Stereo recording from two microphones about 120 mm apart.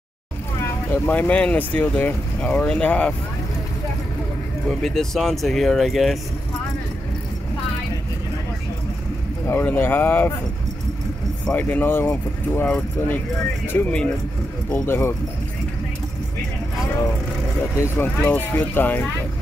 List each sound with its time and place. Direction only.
0.9 s speech: 15° left (ahead or behind)
4.6 s speech: centre (ahead or behind)
9.5 s speech: 20° left (ahead or behind)
11.4 s speech: 15° left (ahead or behind)
17.7 s speech: 15° left (ahead or behind)